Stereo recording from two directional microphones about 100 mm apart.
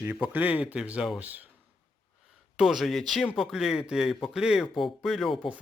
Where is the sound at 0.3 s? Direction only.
15° right (ahead or behind).